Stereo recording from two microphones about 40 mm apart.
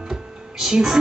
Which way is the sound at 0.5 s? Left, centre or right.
Centre.